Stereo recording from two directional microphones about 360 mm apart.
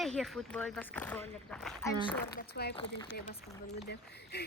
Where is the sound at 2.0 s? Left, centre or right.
Centre.